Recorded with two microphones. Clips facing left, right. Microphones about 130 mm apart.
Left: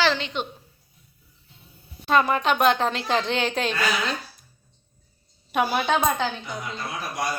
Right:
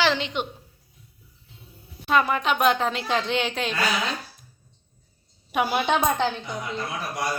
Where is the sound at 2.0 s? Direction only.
5° right (ahead or behind).